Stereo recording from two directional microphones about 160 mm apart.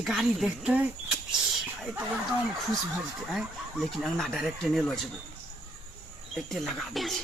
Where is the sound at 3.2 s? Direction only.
Centre (ahead or behind).